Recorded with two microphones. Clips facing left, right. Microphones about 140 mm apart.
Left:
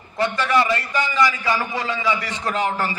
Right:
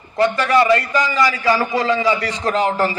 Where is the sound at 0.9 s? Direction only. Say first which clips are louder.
Right 3 dB; 40° right (ahead or behind).